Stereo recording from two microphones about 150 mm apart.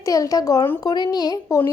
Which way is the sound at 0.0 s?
25° left (ahead or behind).